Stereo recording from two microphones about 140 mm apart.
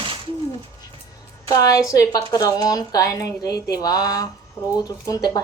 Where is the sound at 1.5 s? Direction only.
25° left (ahead or behind).